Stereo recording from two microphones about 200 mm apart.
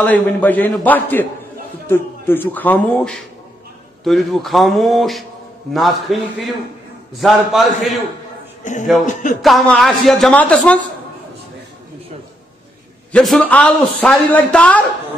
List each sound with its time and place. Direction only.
0.0 s a man's voice: 10° left (ahead or behind)
9.0 s speech: 40° left (ahead or behind)
9.4 s a man's voice: centre (ahead or behind)
13.1 s a man's voice: 5° left (ahead or behind)